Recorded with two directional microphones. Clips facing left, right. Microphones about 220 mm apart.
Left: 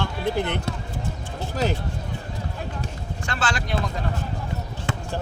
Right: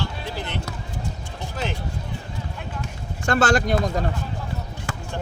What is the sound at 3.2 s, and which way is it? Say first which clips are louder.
Speech: right 9 dB; 45° right (ahead or behind).